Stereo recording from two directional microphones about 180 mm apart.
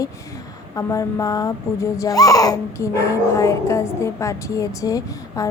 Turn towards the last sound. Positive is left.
turn(degrees=20)  # may be behind; listen again after turning